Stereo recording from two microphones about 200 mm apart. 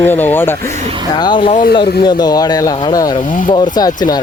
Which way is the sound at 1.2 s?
25° left (ahead or behind).